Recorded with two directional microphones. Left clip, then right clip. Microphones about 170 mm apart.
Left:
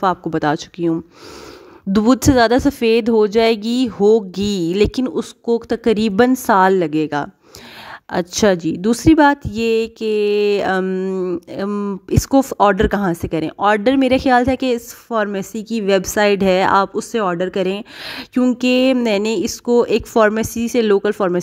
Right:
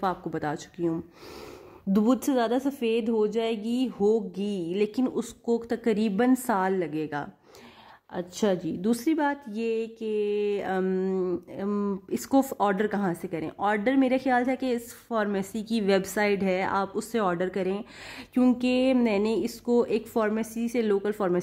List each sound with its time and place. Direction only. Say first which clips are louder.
0.0 s speech: left 12 dB; 40° left (ahead or behind)
8.1 s speech: left 12 dB; 65° left (ahead or behind); by 10.9 s 50° left (ahead or behind)
10.9 s speech: left 7 dB; 30° left (ahead or behind)